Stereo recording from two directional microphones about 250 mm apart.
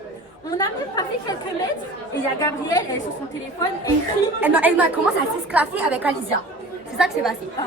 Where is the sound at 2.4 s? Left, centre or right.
Centre.